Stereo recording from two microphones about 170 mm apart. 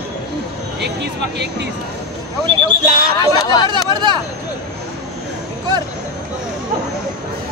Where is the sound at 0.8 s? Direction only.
85° right.